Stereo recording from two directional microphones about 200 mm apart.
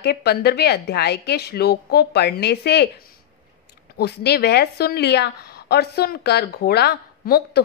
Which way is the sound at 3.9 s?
55° left (ahead or behind).